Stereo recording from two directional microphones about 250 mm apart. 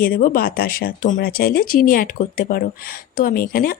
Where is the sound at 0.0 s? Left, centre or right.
Left.